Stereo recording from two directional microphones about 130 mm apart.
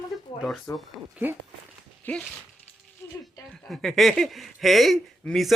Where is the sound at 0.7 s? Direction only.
25° left (ahead or behind).